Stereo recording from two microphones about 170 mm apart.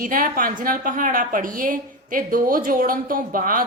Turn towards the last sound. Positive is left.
turn(degrees=-55)  # may be behind; listen again after turning